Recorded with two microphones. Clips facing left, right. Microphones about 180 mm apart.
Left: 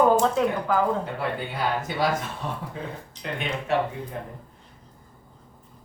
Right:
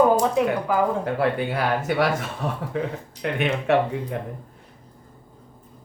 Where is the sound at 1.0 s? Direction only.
70° right (ahead or behind).